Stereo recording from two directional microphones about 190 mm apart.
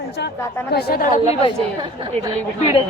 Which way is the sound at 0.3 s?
15° left (ahead or behind).